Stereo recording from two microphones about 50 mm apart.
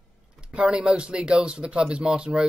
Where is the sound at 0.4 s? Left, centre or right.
Right.